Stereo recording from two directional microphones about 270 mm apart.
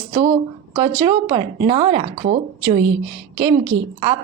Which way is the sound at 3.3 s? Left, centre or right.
Centre.